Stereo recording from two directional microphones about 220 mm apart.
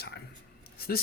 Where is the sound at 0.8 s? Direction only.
45° left (ahead or behind).